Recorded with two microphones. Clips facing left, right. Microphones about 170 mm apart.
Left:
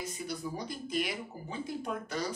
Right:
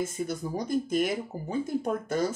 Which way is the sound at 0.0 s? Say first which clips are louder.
Right 7 dB; 50° right (ahead or behind).